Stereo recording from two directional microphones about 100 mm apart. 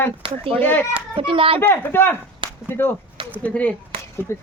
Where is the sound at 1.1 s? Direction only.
65° right (ahead or behind).